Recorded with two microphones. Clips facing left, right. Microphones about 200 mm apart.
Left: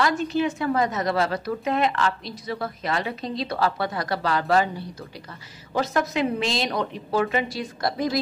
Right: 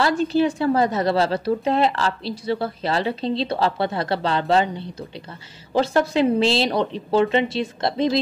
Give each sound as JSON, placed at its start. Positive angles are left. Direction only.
{"t": 0.0, "sound": "a woman's voice", "side_deg": -30}